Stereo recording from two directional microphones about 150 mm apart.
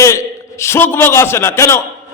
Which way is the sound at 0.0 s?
20° left (ahead or behind).